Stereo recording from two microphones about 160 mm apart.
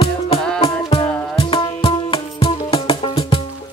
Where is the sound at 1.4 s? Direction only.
35° left (ahead or behind).